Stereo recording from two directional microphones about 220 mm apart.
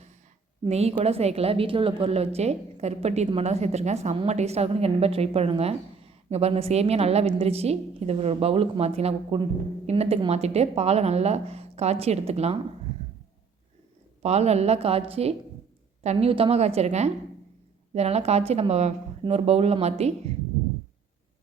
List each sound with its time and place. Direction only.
0.6 s a woman's voice: 30° right (ahead or behind)
14.2 s a woman's voice: 30° right (ahead or behind)